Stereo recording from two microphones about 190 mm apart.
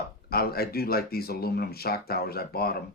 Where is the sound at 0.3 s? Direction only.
55° left (ahead or behind).